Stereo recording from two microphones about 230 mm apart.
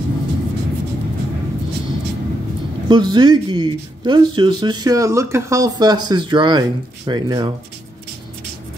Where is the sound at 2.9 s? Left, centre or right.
Centre.